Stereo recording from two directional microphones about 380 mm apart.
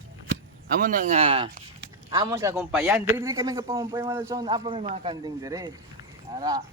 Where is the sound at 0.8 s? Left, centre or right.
Right.